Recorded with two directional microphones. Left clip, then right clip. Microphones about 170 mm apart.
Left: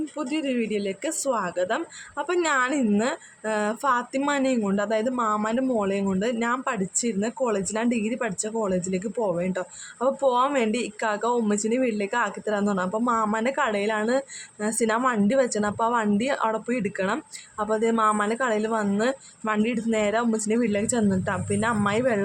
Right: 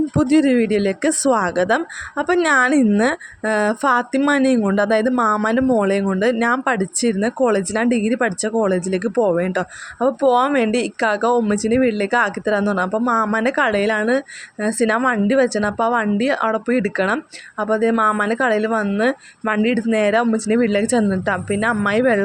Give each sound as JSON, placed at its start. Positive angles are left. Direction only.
{"t": 0.2, "sound": "speech", "side_deg": -30}